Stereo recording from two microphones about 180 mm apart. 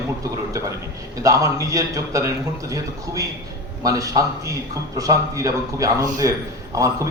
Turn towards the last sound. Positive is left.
turn(degrees=-20)  # may be behind; listen again after turning